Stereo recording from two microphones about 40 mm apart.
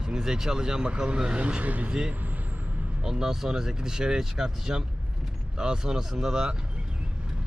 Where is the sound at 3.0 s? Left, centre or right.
Centre.